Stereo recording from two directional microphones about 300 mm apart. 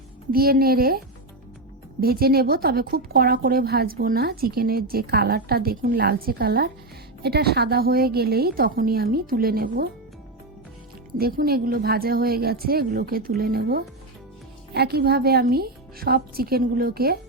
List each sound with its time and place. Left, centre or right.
0.3 s a woman's voice: right
11.2 s a woman's voice: right